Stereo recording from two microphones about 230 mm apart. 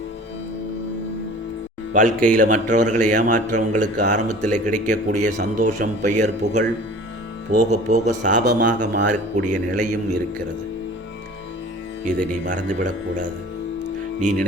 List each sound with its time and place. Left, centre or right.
1.9 s speech: right
8.4 s speech: right
12.5 s speech: right